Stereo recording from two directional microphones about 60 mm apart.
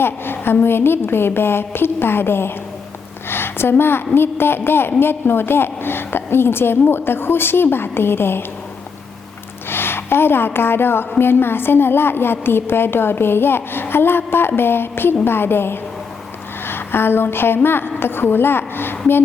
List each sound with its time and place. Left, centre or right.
0.0 s a woman's voice: left
9.6 s a woman's voice: left
16.6 s a sound: left
17.3 s a woman's voice: left